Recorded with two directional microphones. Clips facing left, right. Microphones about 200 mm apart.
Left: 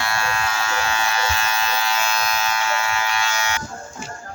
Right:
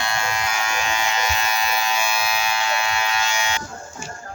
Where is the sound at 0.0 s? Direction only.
20° right (ahead or behind).